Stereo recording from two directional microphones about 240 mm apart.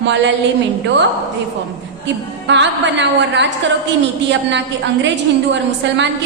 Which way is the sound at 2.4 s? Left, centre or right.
Right.